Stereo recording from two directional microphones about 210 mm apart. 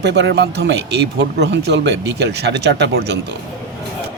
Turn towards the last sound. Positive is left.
turn(degrees=-55)  # may be behind; listen again after turning